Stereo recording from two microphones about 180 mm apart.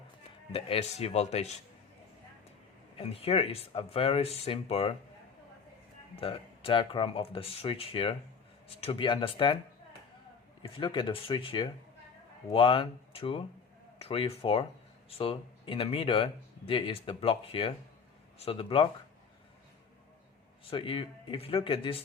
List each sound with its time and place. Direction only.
0.5 s speech: 35° left (ahead or behind)
3.0 s speech: 35° left (ahead or behind)
6.1 s speech: 30° left (ahead or behind)
10.6 s speech: 25° left (ahead or behind)
20.7 s speech: 30° left (ahead or behind)